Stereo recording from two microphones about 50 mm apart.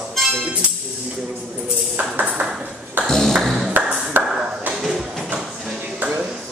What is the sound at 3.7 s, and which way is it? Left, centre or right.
Ping, right.